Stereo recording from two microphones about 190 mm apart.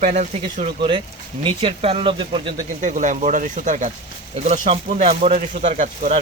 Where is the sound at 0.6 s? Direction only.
25° right (ahead or behind).